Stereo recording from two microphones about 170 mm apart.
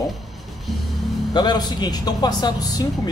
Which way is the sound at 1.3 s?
25° left (ahead or behind).